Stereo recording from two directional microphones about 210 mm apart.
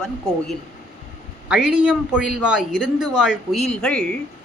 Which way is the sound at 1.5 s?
5° right (ahead or behind).